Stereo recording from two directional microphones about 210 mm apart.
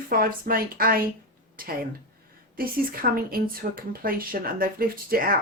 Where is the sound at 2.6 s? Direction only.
45° right (ahead or behind).